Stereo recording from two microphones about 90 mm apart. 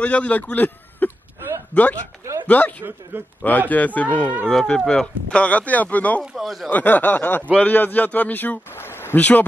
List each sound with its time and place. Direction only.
0.0 s a man's voice: 15° left (ahead or behind)
4.5 s speech: 5° left (ahead or behind)
6.3 s speech: centre (ahead or behind)
6.7 s a man's voice: 20° left (ahead or behind)